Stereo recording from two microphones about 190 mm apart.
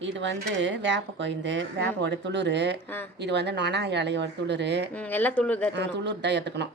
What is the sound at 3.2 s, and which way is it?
Speech, 65° right (ahead or behind).